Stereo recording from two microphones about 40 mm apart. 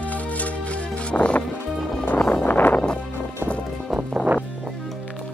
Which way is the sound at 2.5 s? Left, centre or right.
Left.